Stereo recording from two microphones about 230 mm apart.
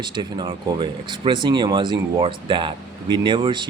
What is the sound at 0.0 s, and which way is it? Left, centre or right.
Speech, centre.